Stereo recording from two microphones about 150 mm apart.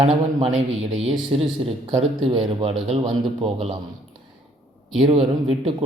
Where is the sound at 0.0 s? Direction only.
45° right (ahead or behind).